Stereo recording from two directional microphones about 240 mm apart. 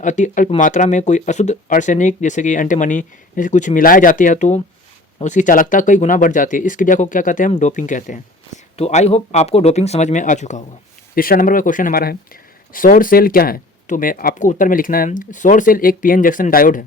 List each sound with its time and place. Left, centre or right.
0.0 s speech: left